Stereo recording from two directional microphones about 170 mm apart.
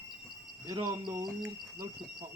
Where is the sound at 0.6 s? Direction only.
25° right (ahead or behind).